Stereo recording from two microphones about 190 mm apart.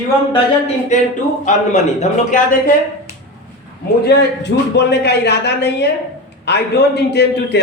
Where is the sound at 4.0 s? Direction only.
60° left (ahead or behind).